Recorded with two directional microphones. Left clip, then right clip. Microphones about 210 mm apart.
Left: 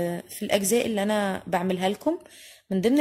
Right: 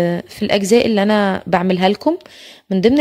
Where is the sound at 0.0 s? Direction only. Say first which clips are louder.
Right 11 dB; 40° right (ahead or behind).